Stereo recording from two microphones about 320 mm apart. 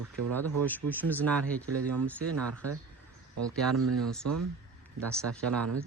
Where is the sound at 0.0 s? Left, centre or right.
Right.